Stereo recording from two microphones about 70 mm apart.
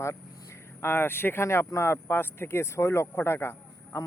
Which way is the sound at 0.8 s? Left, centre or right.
Left.